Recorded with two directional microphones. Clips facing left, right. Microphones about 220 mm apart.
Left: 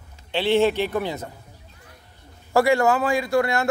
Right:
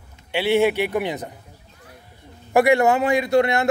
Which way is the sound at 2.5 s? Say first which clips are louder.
Right 2 dB; 20° right (ahead or behind).